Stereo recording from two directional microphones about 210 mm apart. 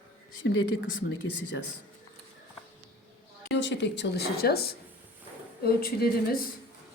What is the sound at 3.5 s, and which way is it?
A woman's voice, 55° left (ahead or behind).